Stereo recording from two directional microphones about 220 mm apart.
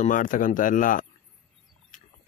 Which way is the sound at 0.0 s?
35° left (ahead or behind).